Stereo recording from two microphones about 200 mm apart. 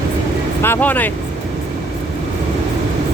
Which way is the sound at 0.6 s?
10° left (ahead or behind).